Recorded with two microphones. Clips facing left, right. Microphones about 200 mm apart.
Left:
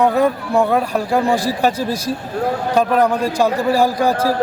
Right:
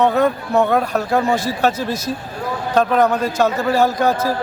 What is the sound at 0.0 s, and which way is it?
A man's voice, 10° left (ahead or behind).